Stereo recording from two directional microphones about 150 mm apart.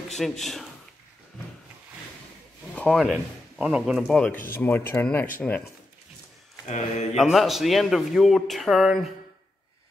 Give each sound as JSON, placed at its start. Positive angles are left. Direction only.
{"t": 0.2, "sound": "speech", "side_deg": 0}
{"t": 2.7, "sound": "speech", "side_deg": 5}
{"t": 6.7, "sound": "speech", "side_deg": 50}
{"t": 7.2, "sound": "speech", "side_deg": 0}